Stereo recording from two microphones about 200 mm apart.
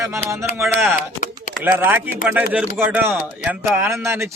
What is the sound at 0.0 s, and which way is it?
A man's voice, 15° right (ahead or behind).